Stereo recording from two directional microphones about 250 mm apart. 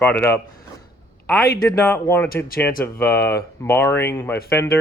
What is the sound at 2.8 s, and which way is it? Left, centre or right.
Speech, centre.